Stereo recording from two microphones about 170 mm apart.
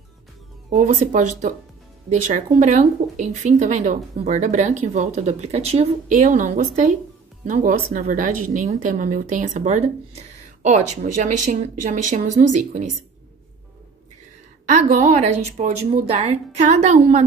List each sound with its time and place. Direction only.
0.7 s speech: 45° right (ahead or behind)
14.7 s speech: 45° right (ahead or behind)